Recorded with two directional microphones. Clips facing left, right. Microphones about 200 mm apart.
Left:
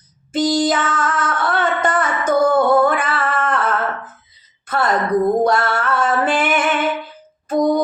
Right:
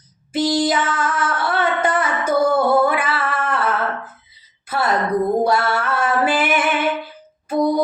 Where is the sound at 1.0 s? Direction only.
5° right (ahead or behind).